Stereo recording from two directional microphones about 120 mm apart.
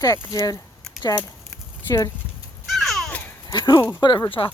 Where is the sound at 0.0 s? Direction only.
30° left (ahead or behind).